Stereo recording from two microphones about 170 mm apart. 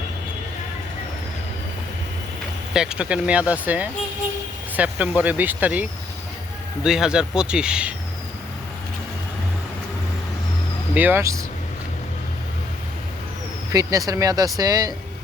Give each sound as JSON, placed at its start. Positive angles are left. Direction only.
{"t": 2.7, "sound": "speech", "side_deg": -5}
{"t": 10.9, "sound": "speech", "side_deg": -10}
{"t": 13.7, "sound": "speech", "side_deg": -20}